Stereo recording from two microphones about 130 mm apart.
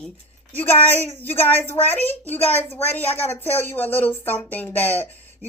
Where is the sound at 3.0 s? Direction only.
55° left (ahead or behind).